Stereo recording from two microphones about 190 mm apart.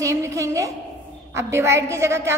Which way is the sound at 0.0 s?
15° right (ahead or behind).